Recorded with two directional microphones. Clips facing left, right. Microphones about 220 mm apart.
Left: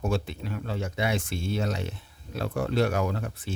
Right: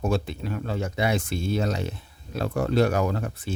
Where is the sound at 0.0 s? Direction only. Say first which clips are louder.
Right 3 dB; 40° right (ahead or behind).